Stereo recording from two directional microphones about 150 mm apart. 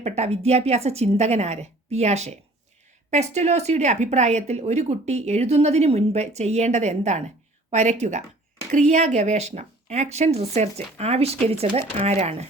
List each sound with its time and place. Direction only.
0.0 s speech: 45° right (ahead or behind)